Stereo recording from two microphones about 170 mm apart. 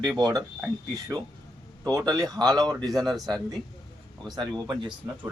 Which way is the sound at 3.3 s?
25° right (ahead or behind).